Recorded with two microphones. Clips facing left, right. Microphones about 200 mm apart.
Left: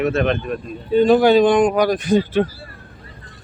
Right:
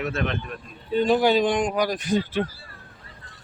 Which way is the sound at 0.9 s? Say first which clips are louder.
Left 7 dB; 60° left (ahead or behind).